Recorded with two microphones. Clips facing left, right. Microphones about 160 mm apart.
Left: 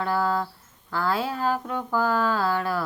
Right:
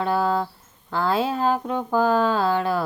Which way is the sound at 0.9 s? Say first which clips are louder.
Right 4 dB; 20° right (ahead or behind).